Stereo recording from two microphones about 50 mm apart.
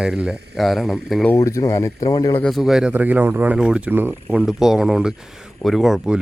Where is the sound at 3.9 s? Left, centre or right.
Right.